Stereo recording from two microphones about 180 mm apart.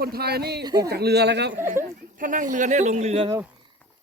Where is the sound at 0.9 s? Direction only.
65° right (ahead or behind).